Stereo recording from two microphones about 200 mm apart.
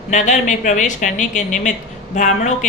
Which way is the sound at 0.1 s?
35° left (ahead or behind).